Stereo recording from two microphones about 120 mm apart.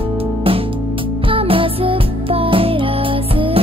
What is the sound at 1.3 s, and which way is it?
Music, 50° right (ahead or behind).